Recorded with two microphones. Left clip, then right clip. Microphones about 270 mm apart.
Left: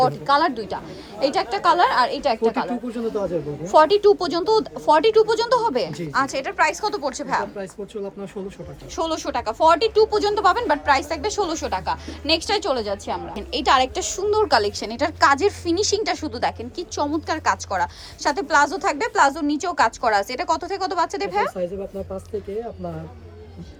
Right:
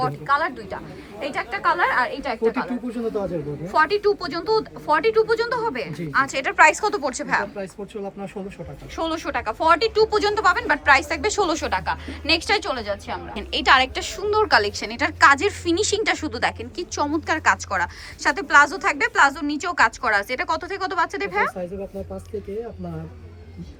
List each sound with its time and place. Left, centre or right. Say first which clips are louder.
0.0 s a woman's voice: left 4 dB; left
2.9 s speech: left 1 dB; centre
3.7 s speech: left 5 dB; centre
9.0 s speech: left 1 dB; centre